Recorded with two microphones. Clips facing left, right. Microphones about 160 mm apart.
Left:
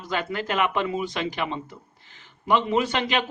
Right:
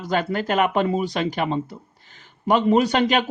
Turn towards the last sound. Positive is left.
turn(degrees=-45)  # may be behind; listen again after turning